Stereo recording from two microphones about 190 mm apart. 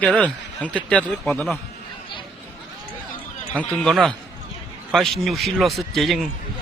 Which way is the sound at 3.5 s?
5° left (ahead or behind).